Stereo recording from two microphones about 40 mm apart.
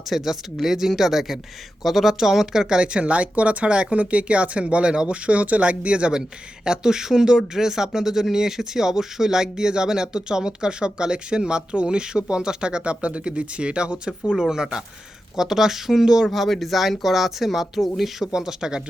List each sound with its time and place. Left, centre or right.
0.1 s speech: centre
16.3 s speech: centre
18.3 s speech: centre